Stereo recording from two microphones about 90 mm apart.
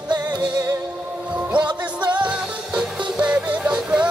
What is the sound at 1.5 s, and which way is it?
Music, 55° right (ahead or behind).